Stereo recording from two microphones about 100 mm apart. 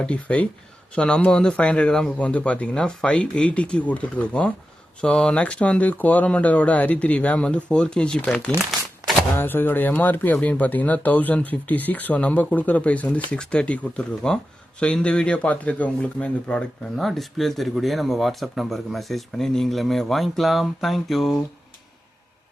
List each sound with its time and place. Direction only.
0.0 s speech: 10° left (ahead or behind)
9.3 s speech: 20° left (ahead or behind); by 21.3 s centre (ahead or behind)